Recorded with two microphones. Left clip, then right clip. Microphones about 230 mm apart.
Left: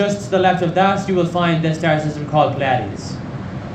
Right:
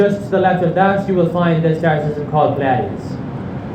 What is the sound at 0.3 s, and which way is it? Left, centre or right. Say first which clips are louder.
A man's voice: right 1 dB; left.